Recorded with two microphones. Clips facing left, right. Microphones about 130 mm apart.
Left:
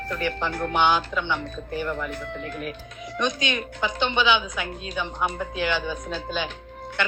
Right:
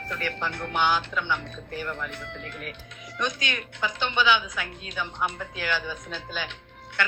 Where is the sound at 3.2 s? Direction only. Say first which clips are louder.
Left 4 dB; 20° left (ahead or behind).